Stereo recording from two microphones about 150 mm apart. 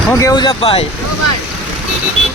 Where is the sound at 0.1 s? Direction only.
20° left (ahead or behind); by 0.9 s 35° left (ahead or behind).